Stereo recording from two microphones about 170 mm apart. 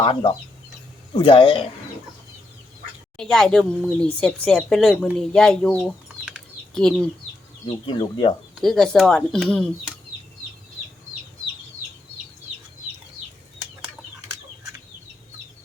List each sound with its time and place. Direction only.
0.0 s speech: 30° left (ahead or behind)
3.2 s speech: centre (ahead or behind)
7.9 s speech: 30° left (ahead or behind)
8.5 s speech: centre (ahead or behind)